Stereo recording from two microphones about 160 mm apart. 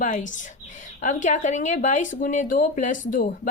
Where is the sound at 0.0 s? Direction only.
50° left (ahead or behind).